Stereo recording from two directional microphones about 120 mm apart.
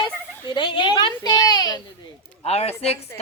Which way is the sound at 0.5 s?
40° left (ahead or behind).